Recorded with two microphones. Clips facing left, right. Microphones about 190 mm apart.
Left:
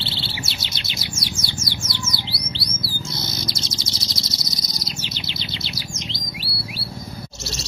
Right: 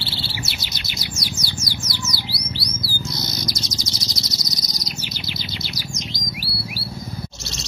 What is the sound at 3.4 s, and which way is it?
Chirp, 25° left (ahead or behind).